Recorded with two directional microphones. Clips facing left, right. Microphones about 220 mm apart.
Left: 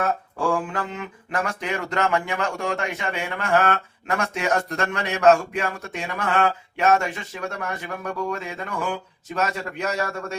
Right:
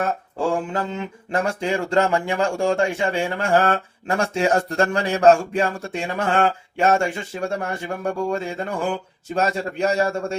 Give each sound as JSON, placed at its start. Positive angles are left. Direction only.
{"t": 0.3, "sound": "mantra", "side_deg": -25}
{"t": 0.8, "sound": "speech", "side_deg": -25}